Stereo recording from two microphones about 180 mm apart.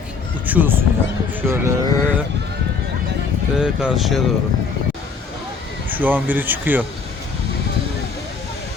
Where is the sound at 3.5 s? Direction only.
5° right (ahead or behind).